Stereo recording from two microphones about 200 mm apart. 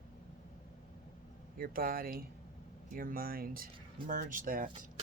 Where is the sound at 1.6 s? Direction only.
45° right (ahead or behind).